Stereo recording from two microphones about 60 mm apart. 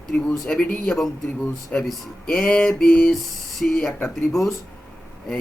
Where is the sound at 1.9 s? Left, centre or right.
Centre.